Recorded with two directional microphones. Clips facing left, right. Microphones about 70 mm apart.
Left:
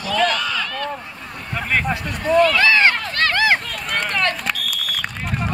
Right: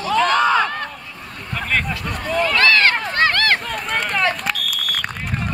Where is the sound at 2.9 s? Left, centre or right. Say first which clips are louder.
Right 3 dB; right.